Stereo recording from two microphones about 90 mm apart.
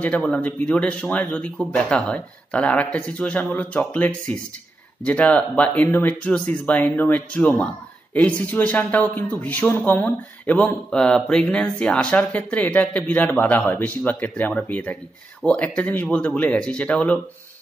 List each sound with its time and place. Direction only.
0.2 s speech: 15° left (ahead or behind)